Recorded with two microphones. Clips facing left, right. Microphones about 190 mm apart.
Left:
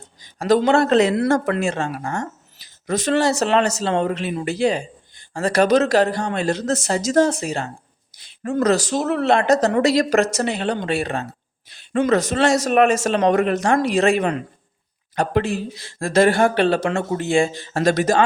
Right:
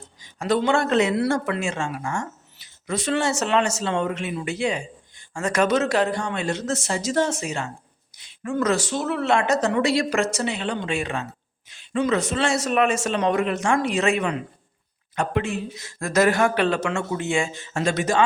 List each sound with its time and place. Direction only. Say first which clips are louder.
0.3 s a woman's voice: left 5 dB; 40° left (ahead or behind)